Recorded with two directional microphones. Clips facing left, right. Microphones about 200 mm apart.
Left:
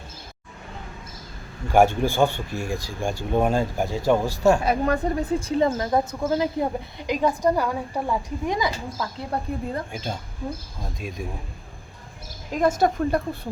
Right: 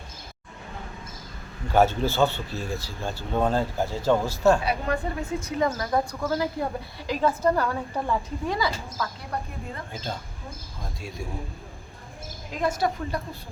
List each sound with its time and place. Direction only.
1.7 s speech: 15° left (ahead or behind)
4.6 s speech: 45° left (ahead or behind); by 11.2 s 15° left (ahead or behind)
12.5 s a woman's voice: 45° left (ahead or behind)